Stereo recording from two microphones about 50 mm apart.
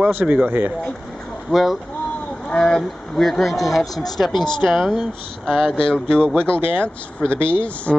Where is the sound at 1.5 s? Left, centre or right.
Centre.